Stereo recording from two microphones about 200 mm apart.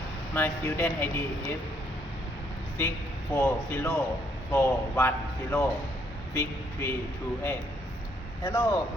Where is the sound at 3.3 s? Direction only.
10° left (ahead or behind).